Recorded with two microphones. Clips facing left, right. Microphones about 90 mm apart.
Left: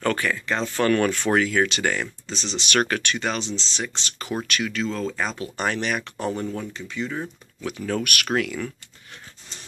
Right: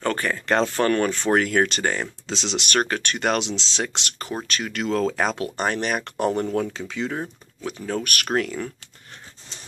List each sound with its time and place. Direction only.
0.0 s speech: 35° right (ahead or behind)
1.4 s speech: 45° right (ahead or behind)
1.8 s speech: 30° right (ahead or behind)
2.2 s speech: 90° right
2.7 s speech: 35° right (ahead or behind)
3.2 s speech: 65° right (ahead or behind); by 3.8 s 85° right
3.8 s speech: 65° right (ahead or behind)
4.5 s speech: 35° right (ahead or behind)
4.7 s speech: 70° right (ahead or behind)
5.6 s speech: 40° right (ahead or behind); by 7.1 s 75° right (ahead or behind)
7.1 s speech: 35° right (ahead or behind)